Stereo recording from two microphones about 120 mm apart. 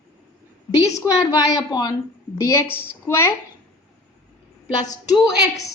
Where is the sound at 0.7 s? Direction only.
25° left (ahead or behind).